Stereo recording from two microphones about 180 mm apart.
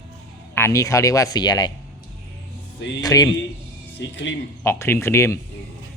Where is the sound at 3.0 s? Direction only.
20° left (ahead or behind).